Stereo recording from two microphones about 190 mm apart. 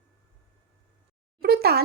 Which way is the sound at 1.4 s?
55° right (ahead or behind).